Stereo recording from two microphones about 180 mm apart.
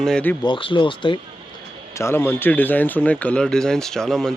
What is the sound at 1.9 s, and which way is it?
A man's voice, 15° left (ahead or behind).